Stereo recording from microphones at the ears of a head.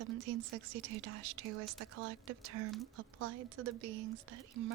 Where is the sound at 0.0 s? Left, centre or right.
Right.